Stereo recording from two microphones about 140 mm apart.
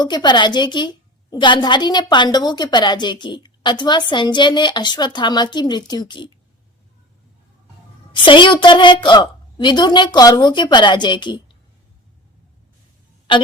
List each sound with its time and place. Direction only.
0.0 s a woman's voice: 30° left (ahead or behind)
8.1 s a woman's voice: 35° left (ahead or behind)
13.3 s a woman's voice: 35° left (ahead or behind)